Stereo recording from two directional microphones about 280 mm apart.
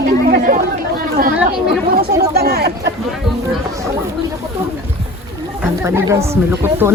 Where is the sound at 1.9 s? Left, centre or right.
Right.